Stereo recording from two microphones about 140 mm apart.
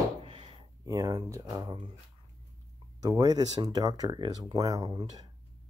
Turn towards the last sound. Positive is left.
turn(degrees=-25)  # may be behind; listen again after turning